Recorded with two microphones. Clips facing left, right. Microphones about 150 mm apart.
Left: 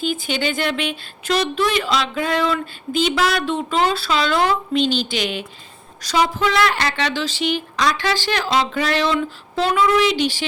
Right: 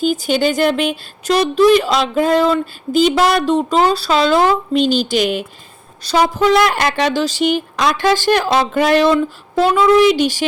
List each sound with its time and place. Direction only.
0.0 s speech: 40° right (ahead or behind)